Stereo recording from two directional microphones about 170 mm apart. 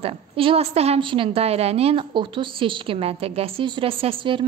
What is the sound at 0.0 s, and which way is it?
A woman's voice, 35° right (ahead or behind).